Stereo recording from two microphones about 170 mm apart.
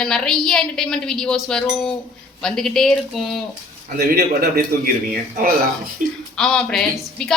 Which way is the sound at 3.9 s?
65° right (ahead or behind).